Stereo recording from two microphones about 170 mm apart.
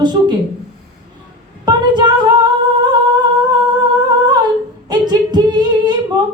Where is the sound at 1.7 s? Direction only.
25° right (ahead or behind).